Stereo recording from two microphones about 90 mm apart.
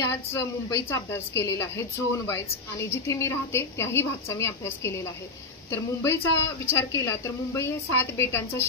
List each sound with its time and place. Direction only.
0.0 s a woman's voice: 30° left (ahead or behind)